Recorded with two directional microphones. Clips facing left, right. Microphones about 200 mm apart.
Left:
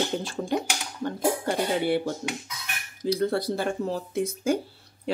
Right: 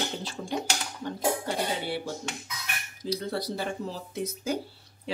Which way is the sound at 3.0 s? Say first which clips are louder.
Left 6 dB; 55° left (ahead or behind).